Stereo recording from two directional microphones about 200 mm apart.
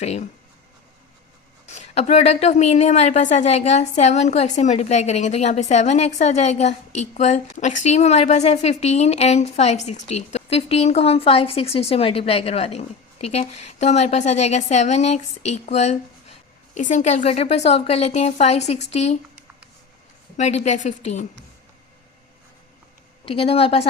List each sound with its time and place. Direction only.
0.0 s a woman's voice: 35° left (ahead or behind)
1.7 s a woman's voice: 35° left (ahead or behind)
20.3 s a woman's voice: 35° left (ahead or behind)
23.2 s a woman's voice: 30° left (ahead or behind)